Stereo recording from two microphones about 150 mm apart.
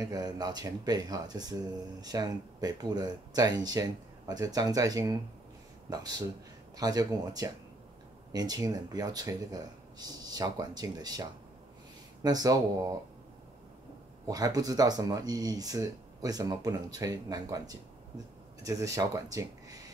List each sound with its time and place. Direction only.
0.0 s speech: 25° right (ahead or behind)
14.2 s speech: 25° right (ahead or behind)